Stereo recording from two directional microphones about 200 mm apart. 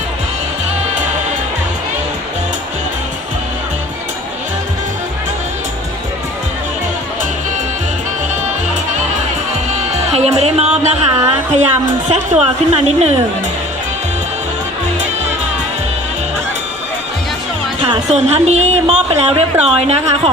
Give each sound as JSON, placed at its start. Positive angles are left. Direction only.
{"t": 9.9, "sound": "music", "side_deg": -35}
{"t": 12.0, "sound": "a woman's voice", "side_deg": -35}
{"t": 18.1, "sound": "a woman's voice", "side_deg": -35}